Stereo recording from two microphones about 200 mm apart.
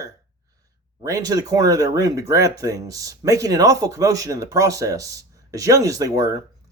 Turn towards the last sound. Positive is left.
turn(degrees=-15)  # may be behind; listen again after turning